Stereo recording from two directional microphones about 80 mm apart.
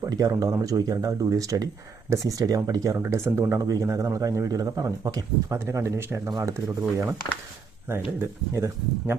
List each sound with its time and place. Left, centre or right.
0.0 s a man's voice: right
3.0 s a man's voice: right